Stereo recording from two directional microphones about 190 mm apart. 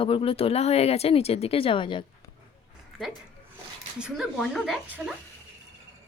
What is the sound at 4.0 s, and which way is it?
Speech, 5° right (ahead or behind).